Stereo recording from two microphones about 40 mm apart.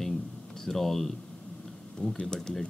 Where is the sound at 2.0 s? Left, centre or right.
Left.